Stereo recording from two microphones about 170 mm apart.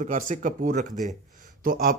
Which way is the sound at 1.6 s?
55° right (ahead or behind).